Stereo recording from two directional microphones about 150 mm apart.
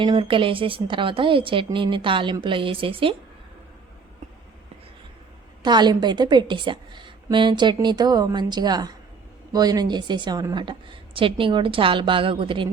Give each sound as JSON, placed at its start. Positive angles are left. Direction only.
{"t": 0.0, "sound": "a woman's voice", "side_deg": -35}
{"t": 5.6, "sound": "a woman's voice", "side_deg": -30}